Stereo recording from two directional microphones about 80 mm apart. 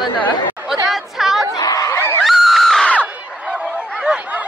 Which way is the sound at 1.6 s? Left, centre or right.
Left.